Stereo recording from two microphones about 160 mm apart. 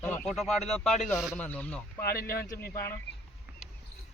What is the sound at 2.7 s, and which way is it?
Speech, 20° left (ahead or behind).